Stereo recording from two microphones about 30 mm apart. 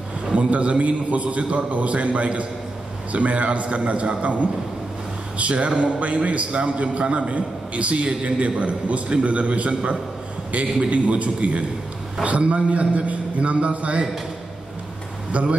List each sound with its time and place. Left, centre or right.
0.3 s a man's voice: right
15.3 s a man's voice: right